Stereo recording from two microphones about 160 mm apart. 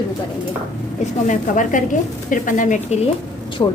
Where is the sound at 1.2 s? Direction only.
55° left (ahead or behind).